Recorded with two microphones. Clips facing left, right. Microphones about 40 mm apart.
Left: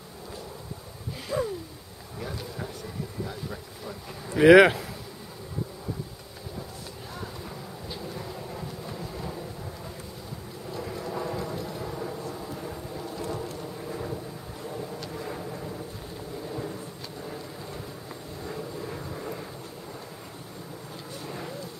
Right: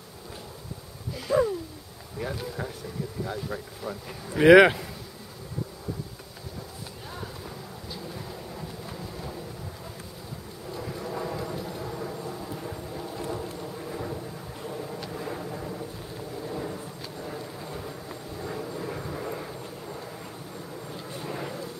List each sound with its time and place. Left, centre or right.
1.3 s a sound: right
2.1 s speech: centre
4.3 s speech: centre
8.1 s vehicle: centre
10.7 s vehicle: centre
21.1 s a sound: centre